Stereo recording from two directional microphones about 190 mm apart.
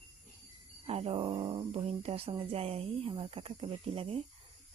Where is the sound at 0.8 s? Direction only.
30° right (ahead or behind).